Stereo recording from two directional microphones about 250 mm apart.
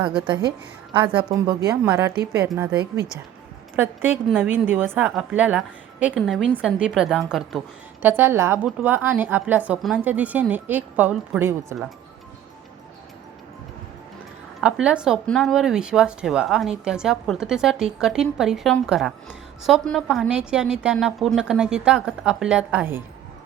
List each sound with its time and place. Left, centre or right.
1.0 s a woman's voice: centre
3.8 s a woman's voice: centre
14.6 s speech: centre